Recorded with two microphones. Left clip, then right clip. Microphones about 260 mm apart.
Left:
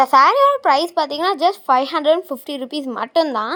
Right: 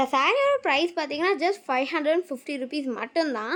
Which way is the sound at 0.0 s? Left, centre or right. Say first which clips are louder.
Left 10 dB; centre.